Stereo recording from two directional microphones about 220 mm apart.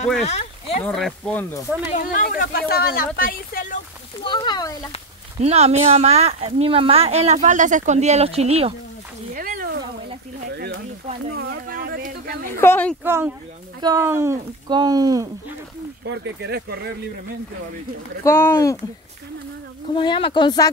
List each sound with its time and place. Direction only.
0.2 s speech: 30° left (ahead or behind)
0.8 s speech: 5° left (ahead or behind)
1.9 s speech: 40° left (ahead or behind)
4.2 s speech: 20° left (ahead or behind)
5.4 s speech: 30° right (ahead or behind)
9.3 s a sound: 40° right (ahead or behind)
12.5 s speech: 10° left (ahead or behind)
13.0 s speech: 10° right (ahead or behind)
16.1 s speech: 50° right (ahead or behind)
18.2 s speech: 10° left (ahead or behind)
19.9 s speech: 20° left (ahead or behind)